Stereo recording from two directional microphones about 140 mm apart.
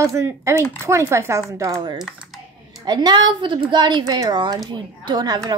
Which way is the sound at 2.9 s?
30° right (ahead or behind).